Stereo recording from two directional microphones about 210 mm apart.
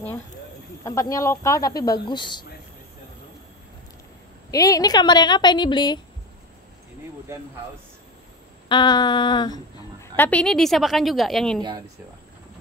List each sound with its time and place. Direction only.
0.8 s speech: 15° left (ahead or behind)
4.5 s a woman's voice: 15° left (ahead or behind)
8.6 s a woman's voice: 20° left (ahead or behind)
10.1 s a woman's voice: 10° left (ahead or behind)